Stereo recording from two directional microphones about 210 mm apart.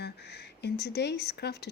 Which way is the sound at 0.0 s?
50° left (ahead or behind).